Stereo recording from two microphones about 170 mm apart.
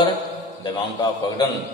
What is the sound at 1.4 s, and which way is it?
Speech, 25° left (ahead or behind).